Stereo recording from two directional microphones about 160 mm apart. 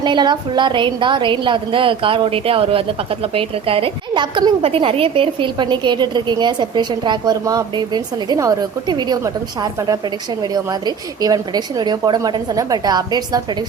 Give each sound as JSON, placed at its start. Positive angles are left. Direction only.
{"t": 0.0, "sound": "a woman's voice", "side_deg": -30}